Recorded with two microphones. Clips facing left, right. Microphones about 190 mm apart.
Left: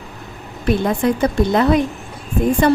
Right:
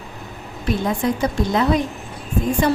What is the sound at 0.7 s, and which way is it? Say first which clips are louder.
Speech: left 4 dB; 60° left (ahead or behind).